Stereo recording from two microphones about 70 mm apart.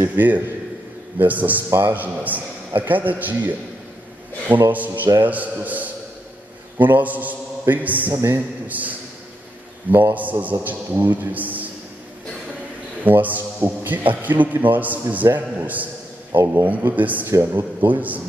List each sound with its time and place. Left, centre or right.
0.0 s a man's voice: right
4.5 s a man's voice: right
8.1 s a man's voice: right
8.6 s a man's voice: right
13.0 s a man's voice: right
16.3 s a man's voice: right
16.6 s a man's voice: right